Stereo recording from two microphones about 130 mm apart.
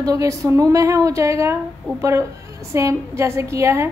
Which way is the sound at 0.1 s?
25° right (ahead or behind).